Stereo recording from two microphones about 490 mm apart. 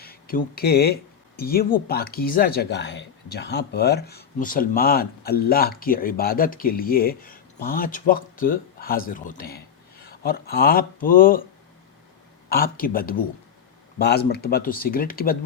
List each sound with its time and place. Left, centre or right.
0.0 s speech: centre
12.5 s speech: centre